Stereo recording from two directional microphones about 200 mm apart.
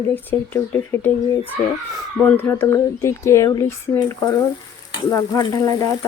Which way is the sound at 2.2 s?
10° left (ahead or behind).